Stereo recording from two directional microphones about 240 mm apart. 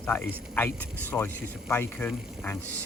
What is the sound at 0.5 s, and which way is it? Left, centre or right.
Speech, centre.